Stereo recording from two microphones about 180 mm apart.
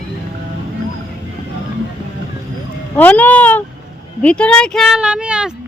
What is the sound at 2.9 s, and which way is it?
Speech, 10° left (ahead or behind).